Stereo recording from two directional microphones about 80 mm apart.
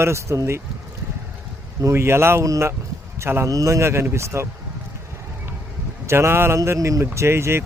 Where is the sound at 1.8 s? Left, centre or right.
Right.